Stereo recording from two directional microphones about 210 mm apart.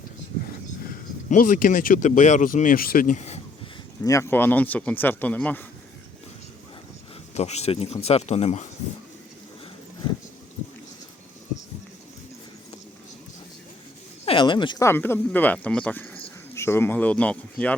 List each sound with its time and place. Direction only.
1.3 s speech: 40° left (ahead or behind)
4.0 s speech: 15° left (ahead or behind)
7.3 s speech: 30° left (ahead or behind)
14.3 s speech: 25° left (ahead or behind); by 17.7 s 5° left (ahead or behind)